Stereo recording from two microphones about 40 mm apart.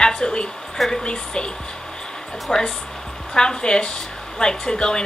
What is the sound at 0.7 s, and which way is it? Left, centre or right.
Speech, centre.